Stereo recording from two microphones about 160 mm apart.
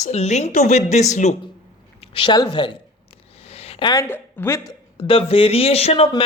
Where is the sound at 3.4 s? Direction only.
40° left (ahead or behind).